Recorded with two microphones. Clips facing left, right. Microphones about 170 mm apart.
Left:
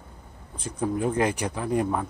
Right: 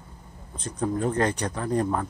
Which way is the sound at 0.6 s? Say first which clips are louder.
Even; 10° left (ahead or behind).